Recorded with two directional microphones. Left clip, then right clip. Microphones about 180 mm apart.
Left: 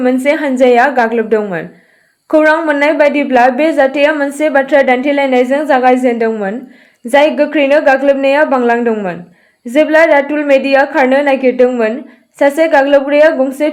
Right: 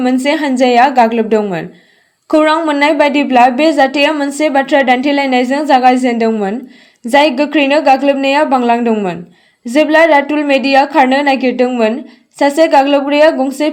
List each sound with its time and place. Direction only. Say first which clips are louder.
0.0 s a woman's voice: left 1 dB; 40° right (ahead or behind)